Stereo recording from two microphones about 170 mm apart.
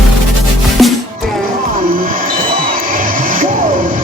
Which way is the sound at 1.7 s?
55° right (ahead or behind).